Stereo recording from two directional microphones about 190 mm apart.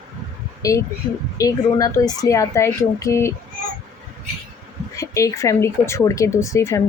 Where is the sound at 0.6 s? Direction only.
15° left (ahead or behind).